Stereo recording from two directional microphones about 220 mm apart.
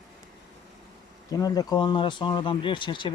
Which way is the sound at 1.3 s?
15° left (ahead or behind).